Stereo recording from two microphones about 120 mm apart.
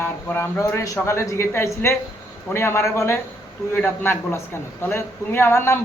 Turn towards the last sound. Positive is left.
turn(degrees=20)  # may be behind; listen again after turning